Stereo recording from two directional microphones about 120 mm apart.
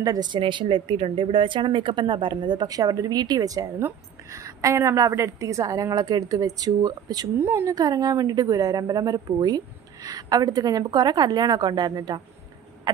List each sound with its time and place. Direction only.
0.0 s a woman's voice: 35° right (ahead or behind)
7.3 s a woman's voice: 20° right (ahead or behind)
7.7 s speech: 30° right (ahead or behind)